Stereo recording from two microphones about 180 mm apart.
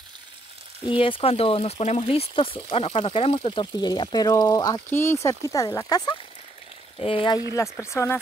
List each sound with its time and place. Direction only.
0.8 s speech: 30° left (ahead or behind)
7.5 s speech: 15° left (ahead or behind)